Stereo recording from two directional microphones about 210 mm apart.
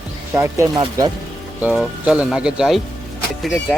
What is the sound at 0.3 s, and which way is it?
Speech, 15° right (ahead or behind).